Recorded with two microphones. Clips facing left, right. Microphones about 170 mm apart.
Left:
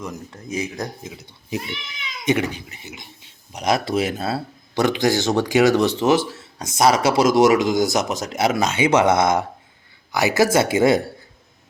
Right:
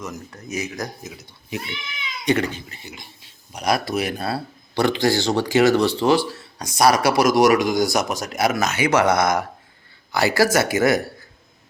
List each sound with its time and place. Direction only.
0.0 s speech: 30° left (ahead or behind)
2.2 s speech: 15° left (ahead or behind)